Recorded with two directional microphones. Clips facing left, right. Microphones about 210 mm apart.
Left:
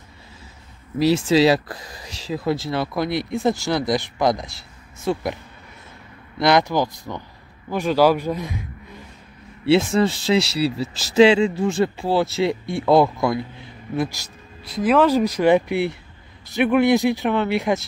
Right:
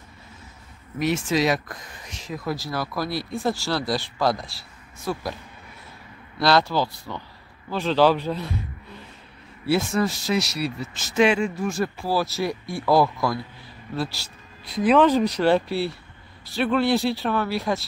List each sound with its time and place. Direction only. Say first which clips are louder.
0.9 s speech: left 6 dB; 30° left (ahead or behind); by 8.6 s 15° left (ahead or behind)
9.7 s speech: left 5 dB; 25° left (ahead or behind)
14.6 s speech: even; centre (ahead or behind); by 17.8 s 20° left (ahead or behind)